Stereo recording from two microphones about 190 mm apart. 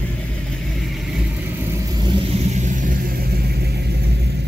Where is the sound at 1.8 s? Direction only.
20° right (ahead or behind).